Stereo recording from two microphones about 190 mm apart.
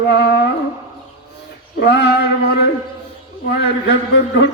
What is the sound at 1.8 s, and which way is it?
Speech, 65° left (ahead or behind).